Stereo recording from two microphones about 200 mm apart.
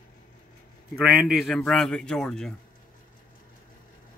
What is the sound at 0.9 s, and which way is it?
Speech, 5° right (ahead or behind).